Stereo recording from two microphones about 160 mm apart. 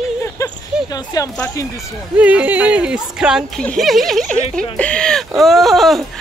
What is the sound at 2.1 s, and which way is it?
Speech, 10° right (ahead or behind).